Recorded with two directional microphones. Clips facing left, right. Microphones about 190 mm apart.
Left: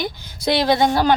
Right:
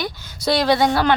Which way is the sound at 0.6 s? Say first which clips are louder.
Left 1 dB; 20° left (ahead or behind).